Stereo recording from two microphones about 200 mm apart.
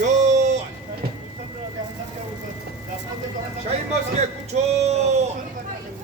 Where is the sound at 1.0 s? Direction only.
50° right (ahead or behind).